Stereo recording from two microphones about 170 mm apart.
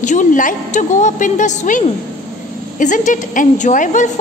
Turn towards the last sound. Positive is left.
turn(degrees=45)  # may be behind; listen again after turning